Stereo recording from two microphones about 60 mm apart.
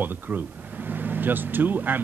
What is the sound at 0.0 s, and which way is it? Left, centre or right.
Speech, right.